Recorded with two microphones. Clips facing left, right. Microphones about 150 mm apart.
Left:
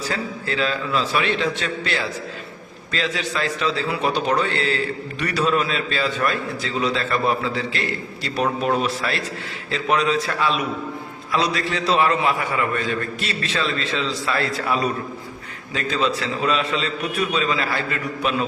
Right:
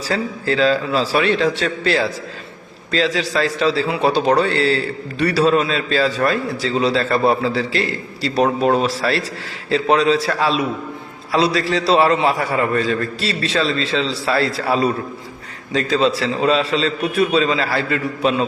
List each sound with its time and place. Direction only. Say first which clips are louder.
0.1 s a man's voice: right 11 dB; 35° right (ahead or behind)
3.2 s a man's voice: right 5 dB; 35° right (ahead or behind)